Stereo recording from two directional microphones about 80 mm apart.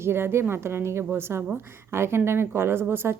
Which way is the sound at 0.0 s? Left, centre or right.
Right.